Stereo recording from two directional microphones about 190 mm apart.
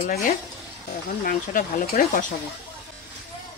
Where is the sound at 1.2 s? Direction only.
50° left (ahead or behind).